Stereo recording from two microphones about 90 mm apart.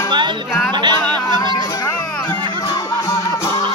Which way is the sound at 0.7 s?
60° right (ahead or behind).